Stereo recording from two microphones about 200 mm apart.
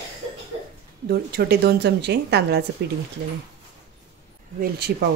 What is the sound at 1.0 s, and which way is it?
Speech, 50° right (ahead or behind).